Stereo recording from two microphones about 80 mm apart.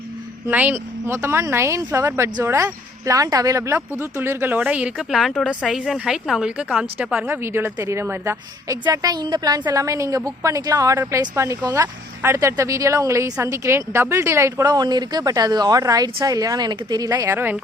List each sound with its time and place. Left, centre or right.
0.5 s speech: right
3.1 s a woman's voice: right
4.2 s speech: right
4.6 s speech: centre
7.3 s speech: right
8.9 s a woman's voice: right
11.7 s speech: right
14.6 s a woman's voice: right
17.3 s speech: right